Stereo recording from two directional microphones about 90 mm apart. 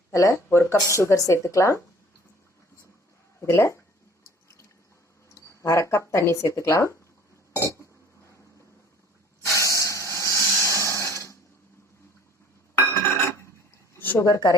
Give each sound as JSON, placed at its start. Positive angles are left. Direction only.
{"t": 0.1, "sound": "speech", "side_deg": 35}
{"t": 3.5, "sound": "speech", "side_deg": 30}
{"t": 5.3, "sound": "speech", "side_deg": 35}
{"t": 7.5, "sound": "chink", "side_deg": 35}
{"t": 9.6, "sound": "hiss", "side_deg": 35}
{"t": 10.6, "sound": "breathing", "side_deg": 35}
{"t": 12.7, "sound": "a sound", "side_deg": 30}
{"t": 14.2, "sound": "speech", "side_deg": 40}